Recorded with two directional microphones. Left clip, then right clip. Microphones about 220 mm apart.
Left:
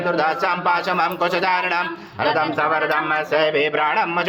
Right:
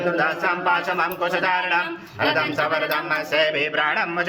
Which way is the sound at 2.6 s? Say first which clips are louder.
Left 3 dB; 25° left (ahead or behind).